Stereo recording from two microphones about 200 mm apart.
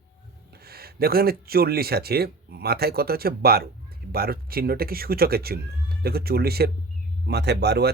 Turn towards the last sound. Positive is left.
turn(degrees=-55)  # may be behind; listen again after turning